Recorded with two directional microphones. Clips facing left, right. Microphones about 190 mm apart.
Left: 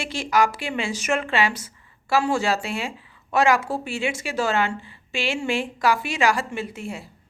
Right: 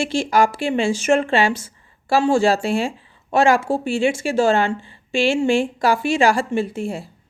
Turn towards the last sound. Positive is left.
turn(degrees=-30)  # may be behind; listen again after turning